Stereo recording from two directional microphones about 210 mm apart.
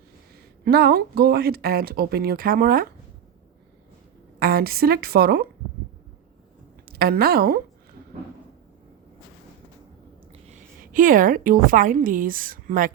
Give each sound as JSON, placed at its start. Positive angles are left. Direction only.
{"t": 0.3, "sound": "speech", "side_deg": -50}
{"t": 4.4, "sound": "speech", "side_deg": -45}
{"t": 6.8, "sound": "a woman's voice", "side_deg": -45}
{"t": 10.4, "sound": "a woman's voice", "side_deg": -35}